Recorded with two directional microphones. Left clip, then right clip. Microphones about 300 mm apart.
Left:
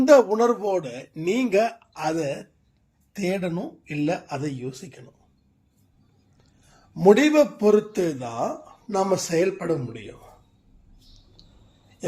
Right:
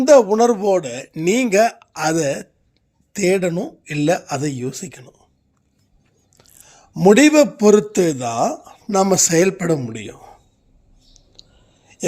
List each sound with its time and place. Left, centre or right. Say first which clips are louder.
0.0 s a man's voice: right 5 dB; right
6.9 s a man's voice: right 5 dB; right
11.4 s a sound: right 10 dB; right